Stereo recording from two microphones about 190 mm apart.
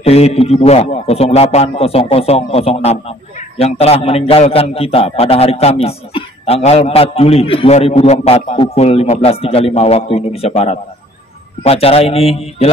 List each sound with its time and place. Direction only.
0.0 s a man's voice: 30° left (ahead or behind)